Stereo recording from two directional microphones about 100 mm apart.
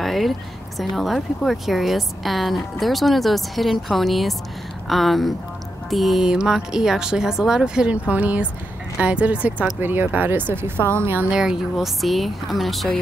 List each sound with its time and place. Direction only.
0.0 s a sound: centre (ahead or behind)
0.7 s a woman's voice: centre (ahead or behind); by 10.7 s 20° right (ahead or behind)
11.2 s a woman's voice: 5° right (ahead or behind)